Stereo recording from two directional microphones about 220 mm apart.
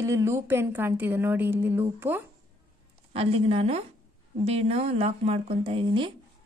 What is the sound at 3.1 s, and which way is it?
A woman's voice, 25° right (ahead or behind).